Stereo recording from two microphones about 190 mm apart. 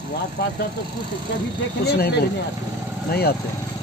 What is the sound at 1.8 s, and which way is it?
Speech, 55° left (ahead or behind).